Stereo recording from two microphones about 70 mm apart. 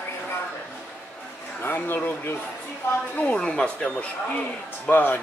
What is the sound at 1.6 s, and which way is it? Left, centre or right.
Speech, left.